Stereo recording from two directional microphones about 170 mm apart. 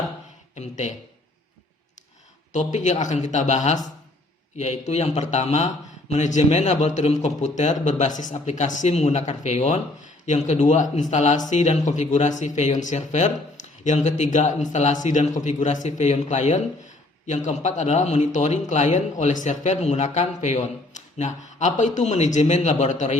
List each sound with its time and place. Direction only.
0.5 s speech: 45° left (ahead or behind)
2.5 s speech: 45° left (ahead or behind)